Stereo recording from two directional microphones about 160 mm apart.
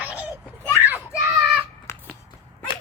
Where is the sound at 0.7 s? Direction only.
10° right (ahead or behind).